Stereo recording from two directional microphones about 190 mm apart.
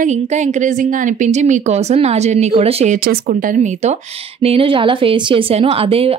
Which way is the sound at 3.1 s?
45° right (ahead or behind).